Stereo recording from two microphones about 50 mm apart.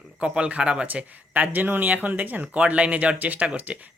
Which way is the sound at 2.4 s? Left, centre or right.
Right.